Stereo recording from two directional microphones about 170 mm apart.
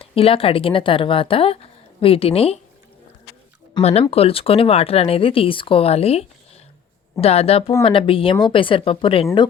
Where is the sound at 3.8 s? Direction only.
40° left (ahead or behind).